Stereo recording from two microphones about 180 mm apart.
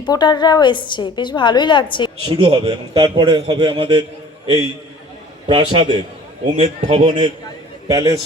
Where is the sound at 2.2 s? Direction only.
30° right (ahead or behind).